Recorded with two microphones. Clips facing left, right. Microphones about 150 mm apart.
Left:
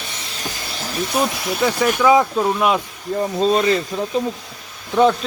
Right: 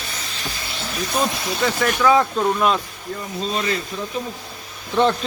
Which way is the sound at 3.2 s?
35° left (ahead or behind).